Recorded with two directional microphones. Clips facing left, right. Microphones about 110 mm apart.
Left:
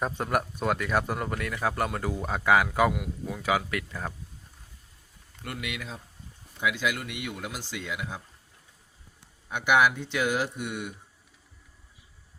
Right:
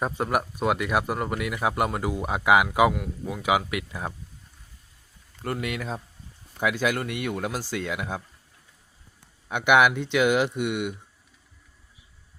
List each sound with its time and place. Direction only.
0.0 s speech: 5° right (ahead or behind)
5.4 s speech: 40° right (ahead or behind); by 8.2 s 55° right (ahead or behind)
9.5 s speech: 65° right (ahead or behind)